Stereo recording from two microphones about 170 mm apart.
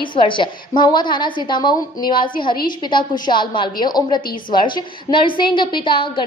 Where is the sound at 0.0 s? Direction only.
30° left (ahead or behind).